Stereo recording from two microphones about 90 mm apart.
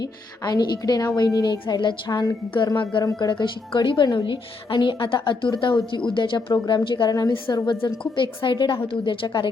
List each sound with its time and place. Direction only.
0.0 s a woman's voice: 45° left (ahead or behind)
7.1 s a woman's voice: 45° left (ahead or behind)
7.9 s a woman's voice: 65° left (ahead or behind)